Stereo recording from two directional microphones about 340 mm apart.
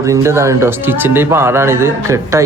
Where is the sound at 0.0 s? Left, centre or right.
Centre.